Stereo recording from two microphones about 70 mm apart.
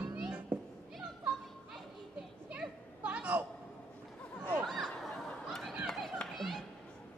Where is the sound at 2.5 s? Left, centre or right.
Centre.